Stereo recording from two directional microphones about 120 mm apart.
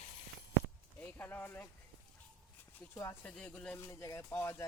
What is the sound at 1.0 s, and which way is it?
Speech, 15° left (ahead or behind).